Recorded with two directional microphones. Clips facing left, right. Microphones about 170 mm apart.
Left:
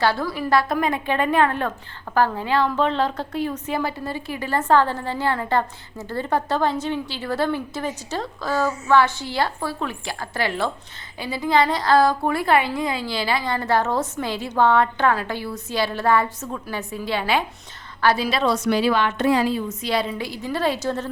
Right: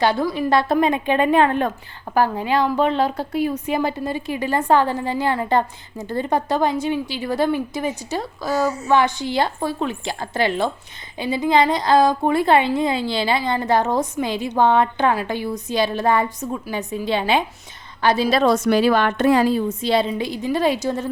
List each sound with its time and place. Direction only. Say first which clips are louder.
0.0 s a woman's voice: right 3 dB; 20° right (ahead or behind)
18.3 s a woman's voice: right 4 dB; 45° right (ahead or behind)
19.8 s a woman's voice: right 4 dB; 25° right (ahead or behind)